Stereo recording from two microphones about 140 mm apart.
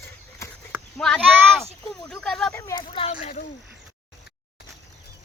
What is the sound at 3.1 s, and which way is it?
Speech, 60° left (ahead or behind).